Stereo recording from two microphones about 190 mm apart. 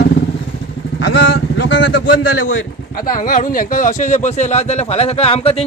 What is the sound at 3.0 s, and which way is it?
Speech, 45° left (ahead or behind).